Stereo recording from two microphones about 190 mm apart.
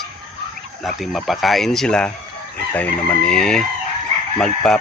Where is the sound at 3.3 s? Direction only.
5° left (ahead or behind).